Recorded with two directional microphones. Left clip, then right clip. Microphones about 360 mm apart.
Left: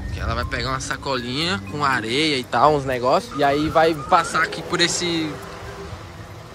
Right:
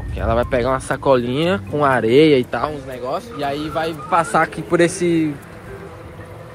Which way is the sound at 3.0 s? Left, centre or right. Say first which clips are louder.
Left 2 dB; left.